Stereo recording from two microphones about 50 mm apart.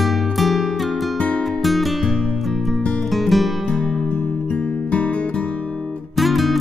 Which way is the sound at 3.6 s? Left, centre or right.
Centre.